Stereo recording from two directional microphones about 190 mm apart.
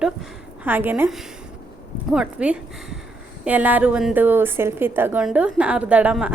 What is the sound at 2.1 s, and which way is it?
A woman's voice, 5° right (ahead or behind).